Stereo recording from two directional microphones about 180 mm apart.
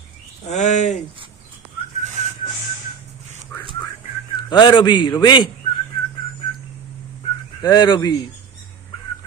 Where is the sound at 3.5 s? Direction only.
15° left (ahead or behind).